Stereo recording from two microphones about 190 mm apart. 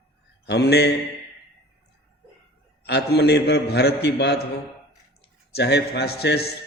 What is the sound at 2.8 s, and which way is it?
A man's voice, 60° left (ahead or behind).